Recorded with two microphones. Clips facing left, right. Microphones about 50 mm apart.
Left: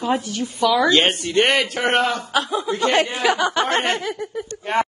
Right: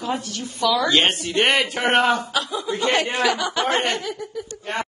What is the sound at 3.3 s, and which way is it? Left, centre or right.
Speech, left.